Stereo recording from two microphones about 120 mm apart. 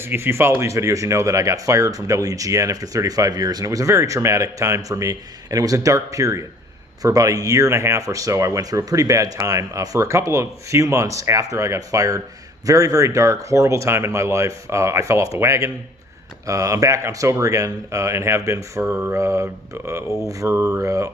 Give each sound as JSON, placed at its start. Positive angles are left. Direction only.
{"t": 0.0, "sound": "speech", "side_deg": -20}
{"t": 18.9, "sound": "mantra", "side_deg": -15}
{"t": 19.2, "sound": "speech", "side_deg": -25}